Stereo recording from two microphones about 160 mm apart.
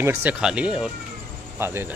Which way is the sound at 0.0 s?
15° right (ahead or behind).